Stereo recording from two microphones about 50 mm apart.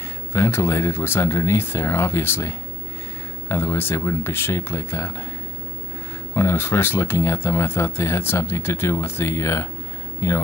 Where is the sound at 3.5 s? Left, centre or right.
Left.